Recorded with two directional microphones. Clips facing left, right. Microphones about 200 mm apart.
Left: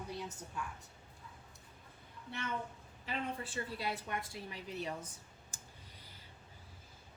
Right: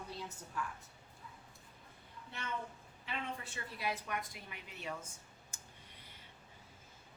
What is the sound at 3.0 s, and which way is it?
A woman's voice, 30° left (ahead or behind).